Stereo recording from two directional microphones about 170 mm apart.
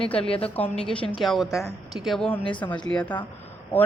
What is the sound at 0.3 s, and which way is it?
Speech, 35° left (ahead or behind).